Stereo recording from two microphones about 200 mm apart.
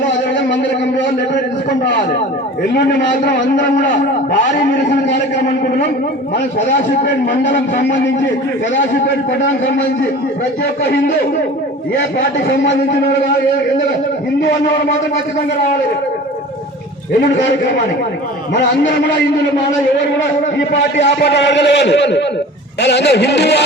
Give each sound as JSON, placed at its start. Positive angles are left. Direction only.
{"t": 3.5, "sound": "a man's voice", "side_deg": 40}
{"t": 7.3, "sound": "a man's voice", "side_deg": 40}
{"t": 8.7, "sound": "a man's voice", "side_deg": 65}
{"t": 18.5, "sound": "a man's voice", "side_deg": 65}
{"t": 20.9, "sound": "a man's voice", "side_deg": 60}